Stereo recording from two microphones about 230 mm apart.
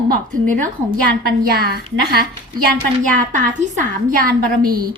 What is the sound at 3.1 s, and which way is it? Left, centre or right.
A woman's voice, right.